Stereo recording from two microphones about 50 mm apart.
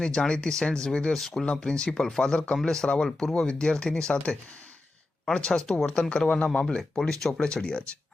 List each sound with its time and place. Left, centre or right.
0.0 s speech: centre
5.5 s speech: centre
7.1 s speech: centre